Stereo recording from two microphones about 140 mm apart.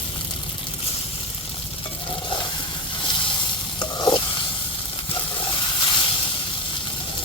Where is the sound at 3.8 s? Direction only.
30° left (ahead or behind).